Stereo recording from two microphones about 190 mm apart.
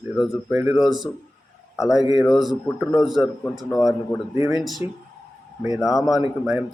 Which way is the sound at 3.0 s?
Centre (ahead or behind).